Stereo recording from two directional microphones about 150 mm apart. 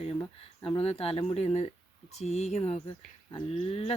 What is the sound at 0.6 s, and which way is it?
Speech, 35° left (ahead or behind).